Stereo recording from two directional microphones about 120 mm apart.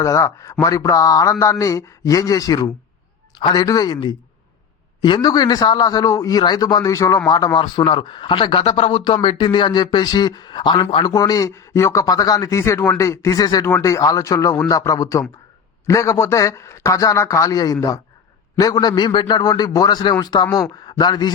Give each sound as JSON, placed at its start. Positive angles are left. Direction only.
{"t": 0.0, "sound": "a man's voice", "side_deg": 25}